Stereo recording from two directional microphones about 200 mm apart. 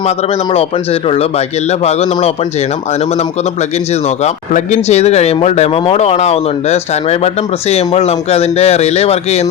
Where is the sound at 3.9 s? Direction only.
35° left (ahead or behind).